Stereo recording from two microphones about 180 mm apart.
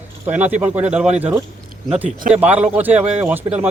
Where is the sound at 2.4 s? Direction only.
10° right (ahead or behind).